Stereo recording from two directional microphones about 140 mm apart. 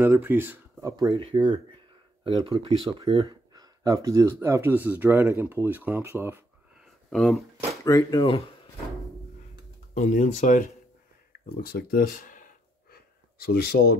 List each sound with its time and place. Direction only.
0.0 s speech: 15° right (ahead or behind)
0.8 s speech: 25° right (ahead or behind)
6.8 s a sound: centre (ahead or behind)
7.8 s speech: 25° left (ahead or behind)
9.9 s speech: 60° left (ahead or behind)
11.6 s a sound: 90° left